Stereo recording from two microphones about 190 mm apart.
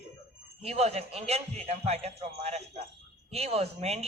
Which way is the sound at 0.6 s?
35° right (ahead or behind).